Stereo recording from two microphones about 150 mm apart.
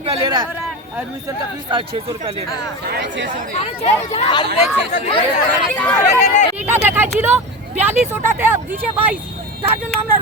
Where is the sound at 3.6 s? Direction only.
45° left (ahead or behind).